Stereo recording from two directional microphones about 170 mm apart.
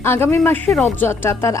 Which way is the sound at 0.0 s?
15° left (ahead or behind).